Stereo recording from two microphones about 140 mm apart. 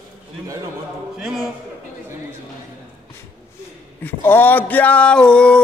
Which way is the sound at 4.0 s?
15° left (ahead or behind).